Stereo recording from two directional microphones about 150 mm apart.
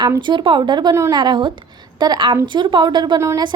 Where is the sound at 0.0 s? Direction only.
30° right (ahead or behind).